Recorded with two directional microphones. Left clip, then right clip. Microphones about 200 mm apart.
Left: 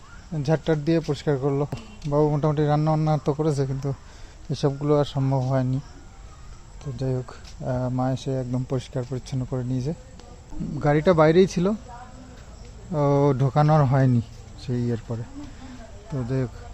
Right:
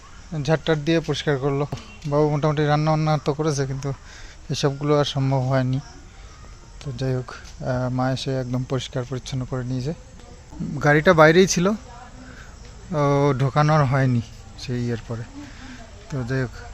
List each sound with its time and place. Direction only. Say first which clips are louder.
0.3 s speech: right 2 dB; 10° left (ahead or behind)
6.9 s speech: right 2 dB; 5° left (ahead or behind)
10.8 s speech: right 4 dB; centre (ahead or behind)
12.9 s speech: right 1 dB; 10° left (ahead or behind)
16.0 s speech: right 2 dB; 5° left (ahead or behind)